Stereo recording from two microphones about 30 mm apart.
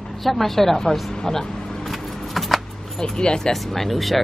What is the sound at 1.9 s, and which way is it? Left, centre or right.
Keys jangling, centre.